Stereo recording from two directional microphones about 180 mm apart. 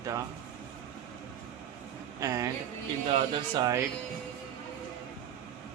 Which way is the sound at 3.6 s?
20° right (ahead or behind).